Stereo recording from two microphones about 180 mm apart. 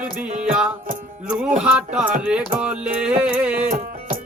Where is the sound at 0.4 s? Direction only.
5° right (ahead or behind).